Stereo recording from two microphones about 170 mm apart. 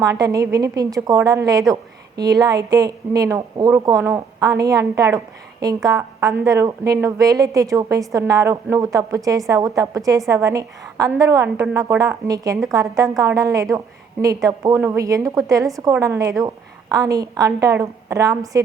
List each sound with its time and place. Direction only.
0.0 s a woman's voice: 20° right (ahead or behind)